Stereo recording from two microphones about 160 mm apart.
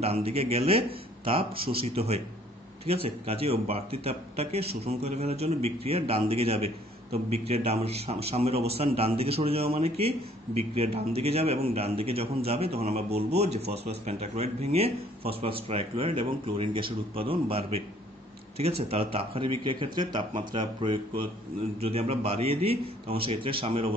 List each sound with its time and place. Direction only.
0.0 s speech: 40° right (ahead or behind)